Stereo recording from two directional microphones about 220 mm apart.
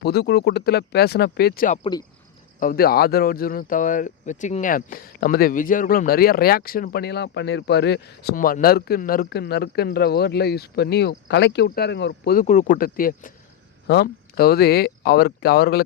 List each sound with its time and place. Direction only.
0.0 s speech: 45° left (ahead or behind)
1.8 s speech: 20° left (ahead or behind)
2.6 s speech: 40° left (ahead or behind)